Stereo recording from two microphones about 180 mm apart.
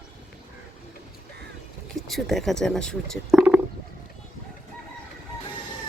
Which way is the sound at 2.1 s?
Centre (ahead or behind).